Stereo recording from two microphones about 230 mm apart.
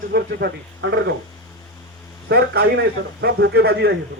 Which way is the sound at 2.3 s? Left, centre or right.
Right.